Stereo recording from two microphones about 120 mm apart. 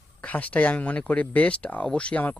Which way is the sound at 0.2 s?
10° left (ahead or behind).